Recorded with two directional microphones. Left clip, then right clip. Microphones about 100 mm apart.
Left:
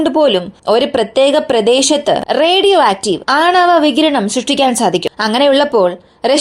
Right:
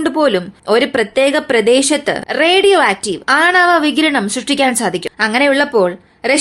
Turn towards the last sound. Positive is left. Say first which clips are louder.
# left 2 dB
turn(degrees=35)  # may be behind; listen again after turning